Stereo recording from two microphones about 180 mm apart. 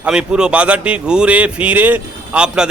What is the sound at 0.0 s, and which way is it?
Speech, 5° right (ahead or behind).